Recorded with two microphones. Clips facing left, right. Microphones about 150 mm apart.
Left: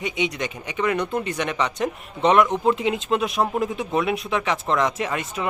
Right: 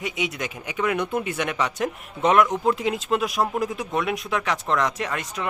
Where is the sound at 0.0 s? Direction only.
Centre (ahead or behind).